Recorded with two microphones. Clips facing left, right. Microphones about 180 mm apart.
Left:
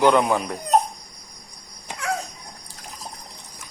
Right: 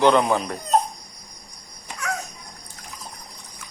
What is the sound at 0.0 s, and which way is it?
Speech, 10° left (ahead or behind).